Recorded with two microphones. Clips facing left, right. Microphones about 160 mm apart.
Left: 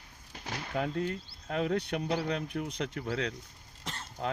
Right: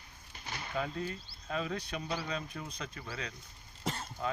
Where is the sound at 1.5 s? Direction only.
65° left (ahead or behind).